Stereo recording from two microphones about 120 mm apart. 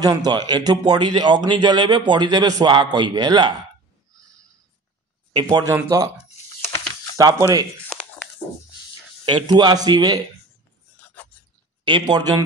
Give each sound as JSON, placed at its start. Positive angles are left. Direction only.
{"t": 0.0, "sound": "speech", "side_deg": -35}
{"t": 5.3, "sound": "speech", "side_deg": -35}
{"t": 7.2, "sound": "speech", "side_deg": -30}
{"t": 7.9, "sound": "a sound", "side_deg": 5}
{"t": 9.2, "sound": "speech", "side_deg": -35}
{"t": 11.9, "sound": "speech", "side_deg": -35}